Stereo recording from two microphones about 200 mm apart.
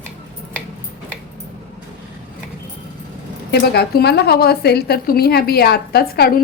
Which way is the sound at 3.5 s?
55° left (ahead or behind).